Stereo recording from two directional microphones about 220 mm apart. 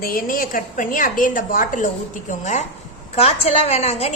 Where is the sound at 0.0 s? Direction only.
40° left (ahead or behind).